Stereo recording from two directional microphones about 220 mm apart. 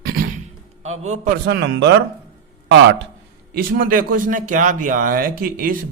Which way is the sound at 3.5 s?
40° right (ahead or behind).